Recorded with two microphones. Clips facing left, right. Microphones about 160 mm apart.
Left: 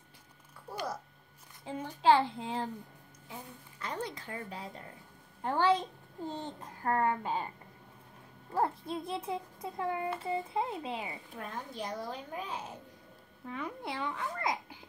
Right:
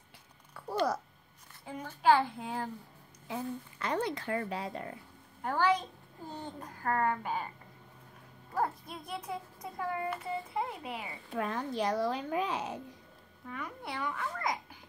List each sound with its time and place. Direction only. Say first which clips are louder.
0.6 s babbling: right 6 dB; 75° right (ahead or behind)
1.7 s a child's voice: left 1 dB; 20° left (ahead or behind)
3.8 s speech: right 5 dB; 70° right (ahead or behind)
5.4 s a child's voice: left 1 dB; 20° left (ahead or behind)
8.5 s a child's voice: left 2 dB; 25° left (ahead or behind)
11.3 s a child's voice: right 9 dB; 80° right
13.5 s a child's voice: left 2 dB; 25° left (ahead or behind)